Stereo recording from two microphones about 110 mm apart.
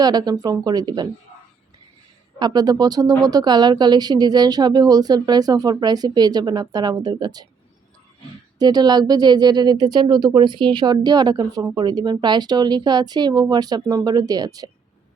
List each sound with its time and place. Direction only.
0.0 s speech: 40° right (ahead or behind)
2.4 s speech: 40° right (ahead or behind)
8.5 s speech: 40° right (ahead or behind)